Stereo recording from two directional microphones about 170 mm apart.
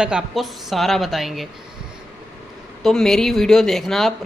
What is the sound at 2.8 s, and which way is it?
Speech, centre (ahead or behind).